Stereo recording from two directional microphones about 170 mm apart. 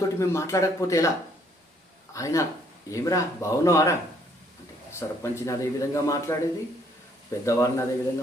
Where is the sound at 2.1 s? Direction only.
20° left (ahead or behind).